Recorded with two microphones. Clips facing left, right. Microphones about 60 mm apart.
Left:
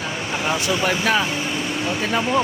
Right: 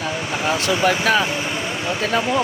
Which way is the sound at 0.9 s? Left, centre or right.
Centre.